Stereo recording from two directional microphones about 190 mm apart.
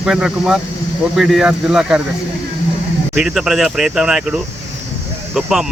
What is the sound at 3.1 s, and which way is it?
Speech, 5° right (ahead or behind).